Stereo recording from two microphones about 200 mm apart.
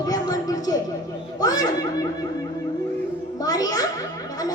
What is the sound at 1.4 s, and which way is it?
Speech, 20° left (ahead or behind).